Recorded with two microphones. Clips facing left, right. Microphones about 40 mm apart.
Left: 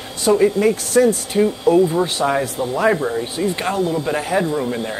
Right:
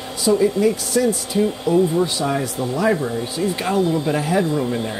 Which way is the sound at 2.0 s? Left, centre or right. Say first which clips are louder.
Left 2 dB; left.